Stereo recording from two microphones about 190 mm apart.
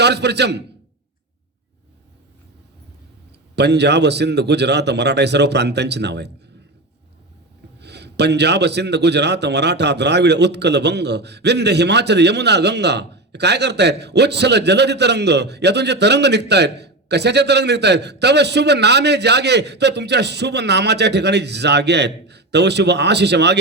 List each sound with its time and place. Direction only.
0.0 s a man's voice: 60° right (ahead or behind)
3.5 s a man's voice: 60° right (ahead or behind)
7.8 s a man's voice: 60° right (ahead or behind)